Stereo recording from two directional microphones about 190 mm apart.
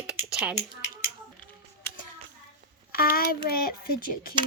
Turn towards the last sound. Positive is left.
turn(degrees=50)  # may be behind; listen again after turning